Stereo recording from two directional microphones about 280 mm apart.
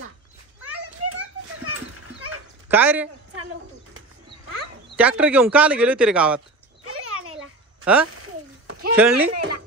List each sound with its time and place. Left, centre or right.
1.0 s children playing: right
2.7 s speech: centre
4.9 s speech: centre
6.8 s a sound: right
7.8 s speech: centre
8.1 s a sound: right
8.9 s speech: centre